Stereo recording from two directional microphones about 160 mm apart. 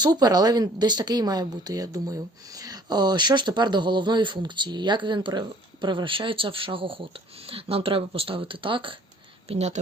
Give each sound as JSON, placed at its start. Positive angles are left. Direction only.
{"t": 0.0, "sound": "speech", "side_deg": -25}
{"t": 9.5, "sound": "speech", "side_deg": -45}